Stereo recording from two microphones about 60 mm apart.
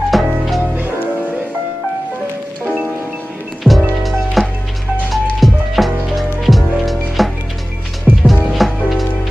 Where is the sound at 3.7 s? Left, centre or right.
Left.